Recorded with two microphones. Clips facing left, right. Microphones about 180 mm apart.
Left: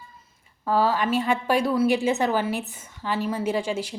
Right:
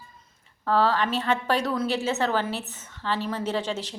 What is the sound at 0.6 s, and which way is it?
A woman's voice, 10° left (ahead or behind).